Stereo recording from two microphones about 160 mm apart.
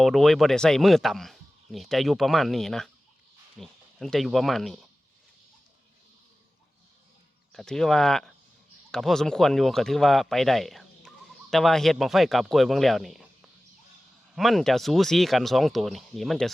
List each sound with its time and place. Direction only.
0.0 s speech: centre (ahead or behind)
7.5 s speech: 5° left (ahead or behind)
14.3 s speech: centre (ahead or behind)